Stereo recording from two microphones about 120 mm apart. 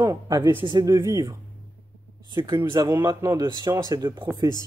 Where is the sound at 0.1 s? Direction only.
35° right (ahead or behind).